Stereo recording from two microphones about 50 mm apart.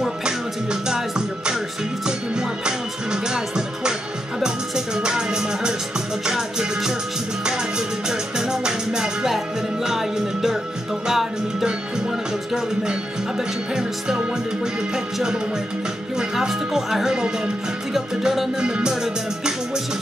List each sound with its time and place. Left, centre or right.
0.2 s music: centre
8.1 s music: centre
13.7 s music: centre
16.3 s music: centre
18.6 s music: centre